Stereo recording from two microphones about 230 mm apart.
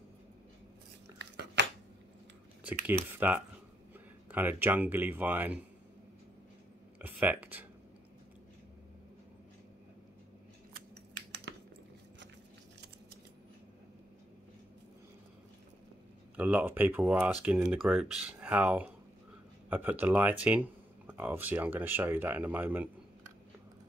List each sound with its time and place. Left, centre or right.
1.1 s a sound: right
3.2 s speech: centre
7.0 s speech: centre
10.7 s typing: right
16.3 s speech: centre